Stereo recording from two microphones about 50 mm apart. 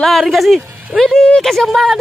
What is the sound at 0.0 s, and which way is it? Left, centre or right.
Speech, centre.